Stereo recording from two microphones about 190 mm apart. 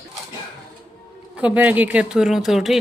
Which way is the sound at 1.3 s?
5° right (ahead or behind).